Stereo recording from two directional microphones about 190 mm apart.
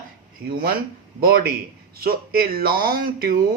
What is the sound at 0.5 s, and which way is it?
Speech, 50° right (ahead or behind).